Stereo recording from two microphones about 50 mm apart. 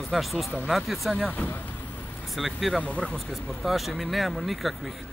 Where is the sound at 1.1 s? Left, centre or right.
Left.